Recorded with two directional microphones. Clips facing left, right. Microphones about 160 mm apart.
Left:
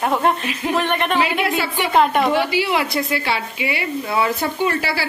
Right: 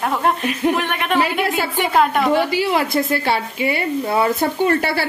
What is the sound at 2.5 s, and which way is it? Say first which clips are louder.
A woman's voice: right 2 dB; 45° right (ahead or behind).